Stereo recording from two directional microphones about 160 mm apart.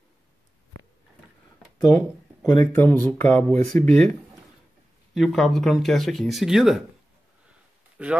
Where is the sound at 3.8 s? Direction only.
45° right (ahead or behind).